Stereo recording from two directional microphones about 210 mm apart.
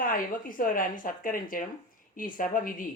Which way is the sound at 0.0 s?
40° left (ahead or behind).